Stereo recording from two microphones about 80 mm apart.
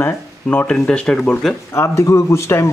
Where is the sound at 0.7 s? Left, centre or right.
Centre.